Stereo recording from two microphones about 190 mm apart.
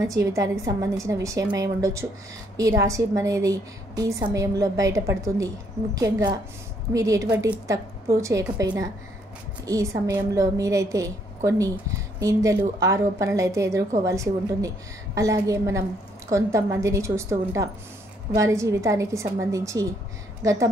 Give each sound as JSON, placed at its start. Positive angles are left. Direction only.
{"t": 0.0, "sound": "a woman's voice", "side_deg": -15}